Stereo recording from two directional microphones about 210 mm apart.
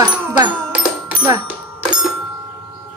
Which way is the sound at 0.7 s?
5° right (ahead or behind).